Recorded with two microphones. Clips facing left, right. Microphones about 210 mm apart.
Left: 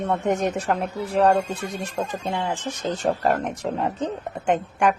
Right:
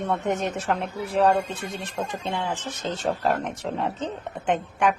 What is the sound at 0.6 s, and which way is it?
A woman's voice, centre (ahead or behind).